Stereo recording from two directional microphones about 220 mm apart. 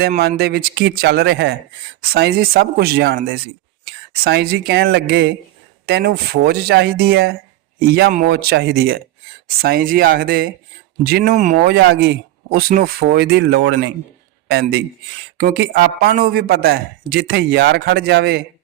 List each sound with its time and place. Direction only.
0.0 s a man's voice: 45° right (ahead or behind)